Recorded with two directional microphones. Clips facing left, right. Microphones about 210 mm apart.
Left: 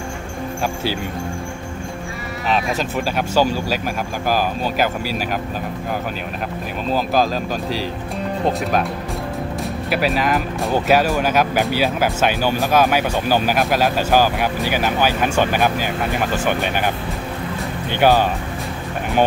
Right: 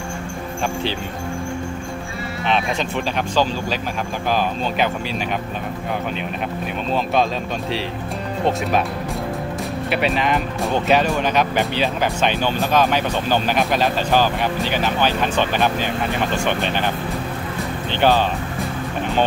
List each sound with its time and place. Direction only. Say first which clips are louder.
3.2 s speech: left 3 dB; 10° left (ahead or behind)
9.8 s speech: left 1 dB; centre (ahead or behind)
17.9 s speech: left 2 dB; 10° left (ahead or behind)